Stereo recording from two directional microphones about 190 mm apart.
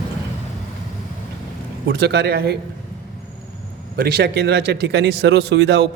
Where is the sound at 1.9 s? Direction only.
60° right (ahead or behind).